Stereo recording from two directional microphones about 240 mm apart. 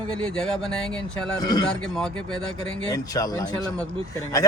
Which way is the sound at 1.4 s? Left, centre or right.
Centre.